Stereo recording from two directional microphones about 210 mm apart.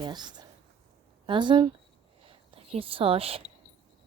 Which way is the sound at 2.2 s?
25° right (ahead or behind).